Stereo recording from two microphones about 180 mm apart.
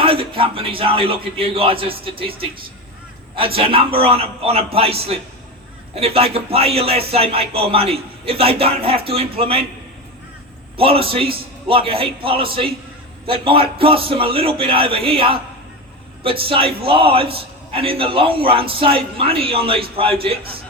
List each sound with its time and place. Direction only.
0.0 s a man's voice: 30° right (ahead or behind)
10.8 s a man's voice: 30° right (ahead or behind)